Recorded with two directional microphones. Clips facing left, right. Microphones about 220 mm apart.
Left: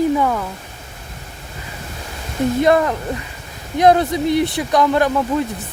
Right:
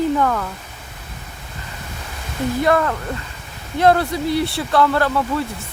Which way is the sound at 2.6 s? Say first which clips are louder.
Left 1 dB; 20° left (ahead or behind).